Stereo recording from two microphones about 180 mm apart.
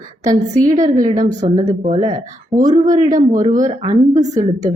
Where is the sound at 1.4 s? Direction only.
40° right (ahead or behind).